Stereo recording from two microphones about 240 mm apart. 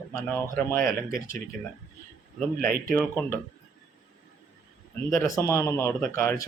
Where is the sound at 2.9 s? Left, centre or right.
Centre.